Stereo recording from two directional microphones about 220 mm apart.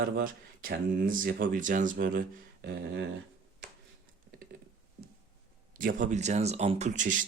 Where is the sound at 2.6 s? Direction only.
50° right (ahead or behind).